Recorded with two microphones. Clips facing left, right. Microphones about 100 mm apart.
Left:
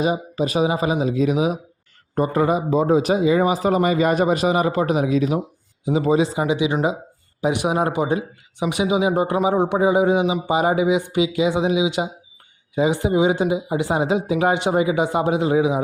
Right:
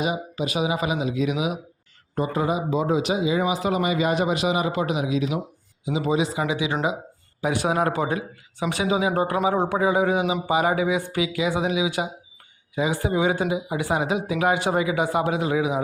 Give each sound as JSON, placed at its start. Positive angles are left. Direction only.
{"t": 0.0, "sound": "a man's voice", "side_deg": 35}